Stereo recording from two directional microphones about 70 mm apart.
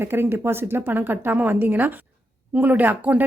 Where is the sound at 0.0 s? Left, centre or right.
Right.